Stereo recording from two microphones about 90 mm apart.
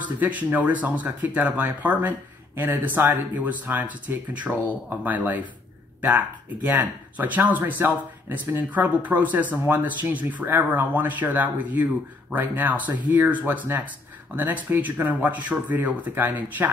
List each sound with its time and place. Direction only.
0.2 s speech: 15° right (ahead or behind)